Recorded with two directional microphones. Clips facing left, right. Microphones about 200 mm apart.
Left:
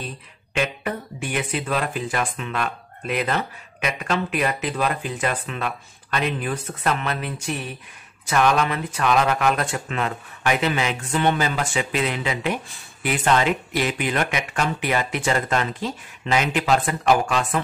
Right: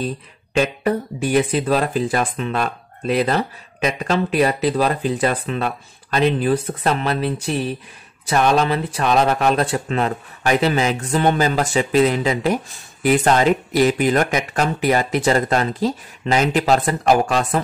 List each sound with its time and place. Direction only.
0.6 s speech: 35° right (ahead or behind)